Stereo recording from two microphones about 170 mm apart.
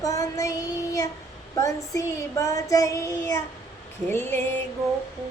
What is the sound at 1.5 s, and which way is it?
Female singing, 20° left (ahead or behind).